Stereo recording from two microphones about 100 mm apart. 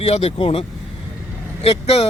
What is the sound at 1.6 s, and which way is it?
Speech, 90° left.